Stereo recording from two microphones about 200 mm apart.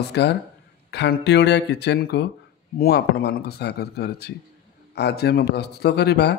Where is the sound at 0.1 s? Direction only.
55° left (ahead or behind).